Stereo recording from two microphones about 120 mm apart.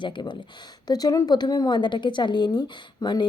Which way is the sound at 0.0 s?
40° left (ahead or behind).